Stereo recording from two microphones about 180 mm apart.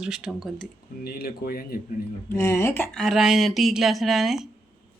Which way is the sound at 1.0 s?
60° left (ahead or behind).